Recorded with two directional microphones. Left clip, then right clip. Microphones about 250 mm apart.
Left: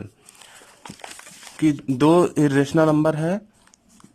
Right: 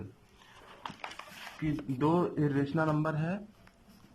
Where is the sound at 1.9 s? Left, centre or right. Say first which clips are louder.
Left 12 dB; left.